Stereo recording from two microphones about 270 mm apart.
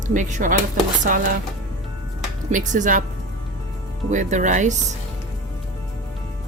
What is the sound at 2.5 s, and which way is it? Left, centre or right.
Speech, right.